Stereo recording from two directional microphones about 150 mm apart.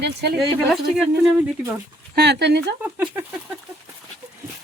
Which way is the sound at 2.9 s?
10° right (ahead or behind).